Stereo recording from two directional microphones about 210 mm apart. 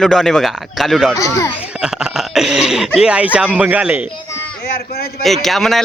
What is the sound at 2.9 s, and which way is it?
Speech, 5° right (ahead or behind).